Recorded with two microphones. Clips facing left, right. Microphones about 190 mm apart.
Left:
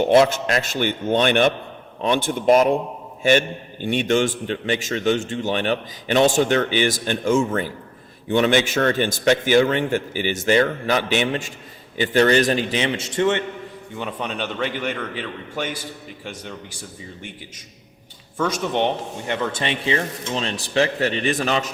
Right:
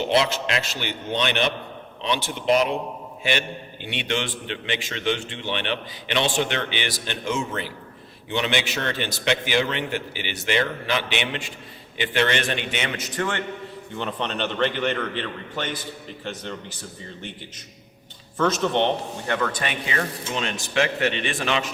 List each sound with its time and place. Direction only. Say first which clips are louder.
0.0 s a man's voice: left 7 dB; 50° left (ahead or behind); by 13.4 s 25° left (ahead or behind)
14.0 s a man's voice: even; 10° left (ahead or behind)
18.3 s a man's voice: right 1 dB; 10° left (ahead or behind); by 21.7 s 40° left (ahead or behind)